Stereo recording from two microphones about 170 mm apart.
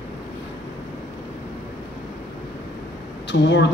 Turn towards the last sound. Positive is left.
turn(degrees=90)